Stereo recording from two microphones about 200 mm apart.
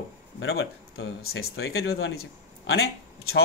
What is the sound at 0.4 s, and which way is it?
Speech, 60° left (ahead or behind).